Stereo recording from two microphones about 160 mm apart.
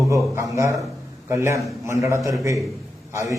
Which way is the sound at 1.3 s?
20° right (ahead or behind).